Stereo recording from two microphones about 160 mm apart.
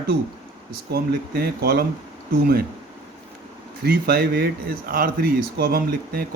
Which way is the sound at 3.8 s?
70° right (ahead or behind).